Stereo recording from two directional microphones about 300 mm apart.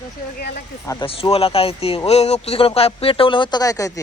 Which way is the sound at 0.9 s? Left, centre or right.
Centre.